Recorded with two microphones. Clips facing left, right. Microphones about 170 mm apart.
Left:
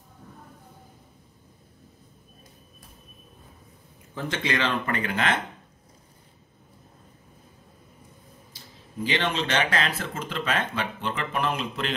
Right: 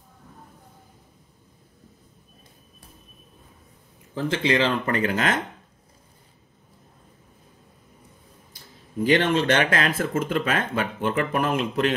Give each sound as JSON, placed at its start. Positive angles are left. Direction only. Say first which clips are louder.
{"t": 4.3, "sound": "speech", "louder": "right 5 dB", "side_deg": -30}
{"t": 9.0, "sound": "speech", "louder": "right 7 dB", "side_deg": -50}